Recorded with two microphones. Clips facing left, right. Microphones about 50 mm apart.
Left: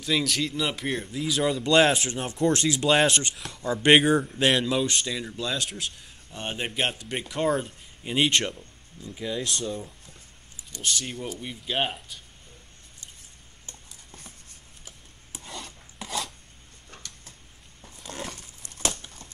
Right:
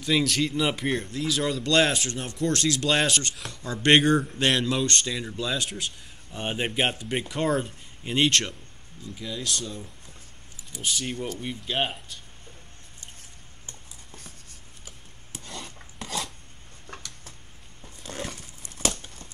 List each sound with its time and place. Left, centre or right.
0.0 s speech: centre
10.7 s speech: centre
15.5 s filing: centre
17.8 s a sound: centre